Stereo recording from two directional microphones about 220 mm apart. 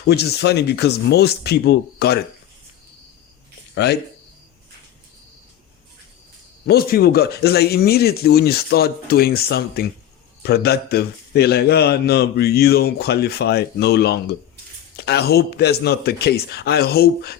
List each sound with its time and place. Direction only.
0.0 s a man's voice: 50° left (ahead or behind)
3.8 s a man's voice: 50° left (ahead or behind)
6.7 s a man's voice: 45° left (ahead or behind)